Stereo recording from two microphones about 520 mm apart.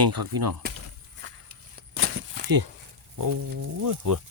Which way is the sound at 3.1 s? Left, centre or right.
Right.